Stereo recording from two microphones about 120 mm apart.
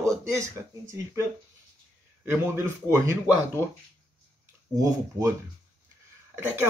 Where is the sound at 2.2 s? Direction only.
20° right (ahead or behind).